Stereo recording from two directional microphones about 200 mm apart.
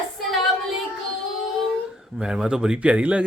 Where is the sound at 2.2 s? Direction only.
5° right (ahead or behind).